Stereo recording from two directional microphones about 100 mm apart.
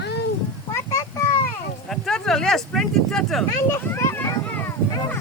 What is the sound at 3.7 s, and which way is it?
A child's voice, 25° left (ahead or behind).